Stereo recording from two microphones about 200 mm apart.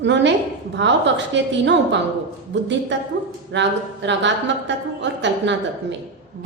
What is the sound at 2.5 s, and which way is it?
A woman's voice, 65° right (ahead or behind).